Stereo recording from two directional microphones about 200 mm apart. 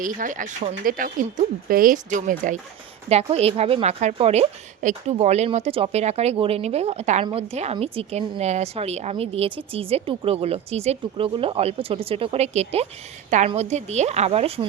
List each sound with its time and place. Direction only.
0.0 s a woman's voice: 40° right (ahead or behind)